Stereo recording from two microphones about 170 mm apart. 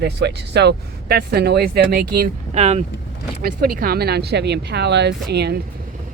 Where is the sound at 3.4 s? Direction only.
60° right (ahead or behind).